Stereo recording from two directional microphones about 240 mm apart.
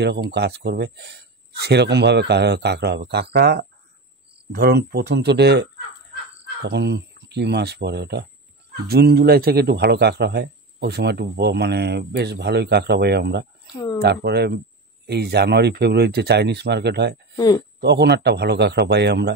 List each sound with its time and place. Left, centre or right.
0.0 s speech: right
13.7 s speech: centre
14.0 s speech: right
17.4 s speech: centre
17.7 s speech: right